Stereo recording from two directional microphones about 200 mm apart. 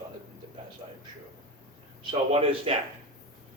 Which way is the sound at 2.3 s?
30° right (ahead or behind).